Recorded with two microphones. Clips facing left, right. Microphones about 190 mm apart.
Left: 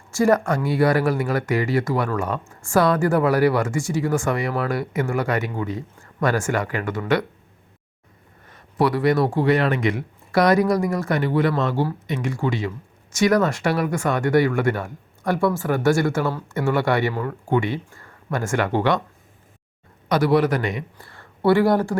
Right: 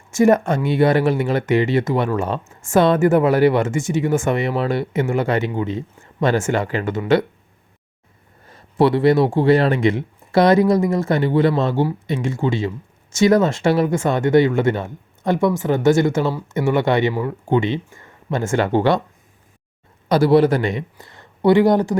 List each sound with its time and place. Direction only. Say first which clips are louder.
0.1 s speech: right 4 dB; 20° right (ahead or behind)
8.4 s speech: right 5 dB; 30° right (ahead or behind)
20.1 s speech: right 4 dB; 30° right (ahead or behind)